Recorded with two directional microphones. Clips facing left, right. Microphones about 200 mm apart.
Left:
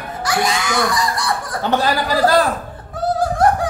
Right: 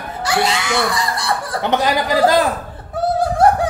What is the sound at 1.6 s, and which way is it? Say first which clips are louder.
Speech: right 1 dB; 20° right (ahead or behind).